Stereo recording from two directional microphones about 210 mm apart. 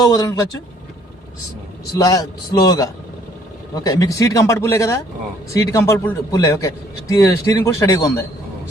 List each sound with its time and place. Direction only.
0.0 s speech: 20° left (ahead or behind)
2.0 s a man's voice: 15° left (ahead or behind)